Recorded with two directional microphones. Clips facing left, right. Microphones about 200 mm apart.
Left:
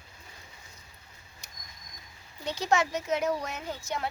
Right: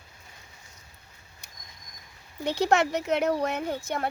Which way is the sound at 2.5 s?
60° right (ahead or behind).